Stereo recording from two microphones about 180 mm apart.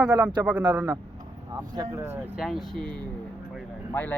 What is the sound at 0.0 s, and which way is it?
Speech, 5° right (ahead or behind).